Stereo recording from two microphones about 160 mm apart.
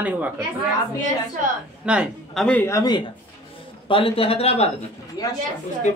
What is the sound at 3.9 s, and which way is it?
Speech, 35° left (ahead or behind).